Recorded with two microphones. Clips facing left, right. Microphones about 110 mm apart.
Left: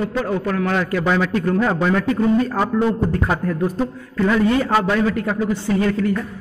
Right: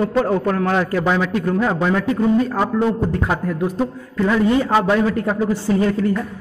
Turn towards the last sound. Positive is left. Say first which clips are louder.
# right 1 dB
turn(degrees=-25)  # may be behind; listen again after turning